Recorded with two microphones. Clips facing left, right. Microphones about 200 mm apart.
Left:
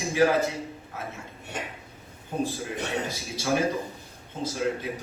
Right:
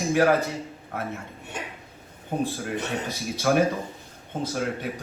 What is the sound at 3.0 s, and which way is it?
Speech, 60° right (ahead or behind).